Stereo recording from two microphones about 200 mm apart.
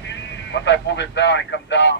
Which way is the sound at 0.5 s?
60° left (ahead or behind).